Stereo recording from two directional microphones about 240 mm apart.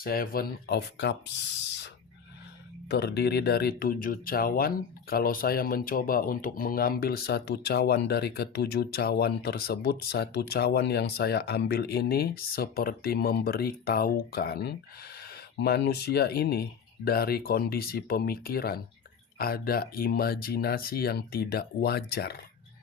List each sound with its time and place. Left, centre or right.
0.0 s speech: left
2.9 s speech: left